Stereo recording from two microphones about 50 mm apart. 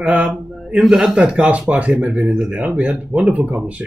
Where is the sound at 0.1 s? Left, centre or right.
Right.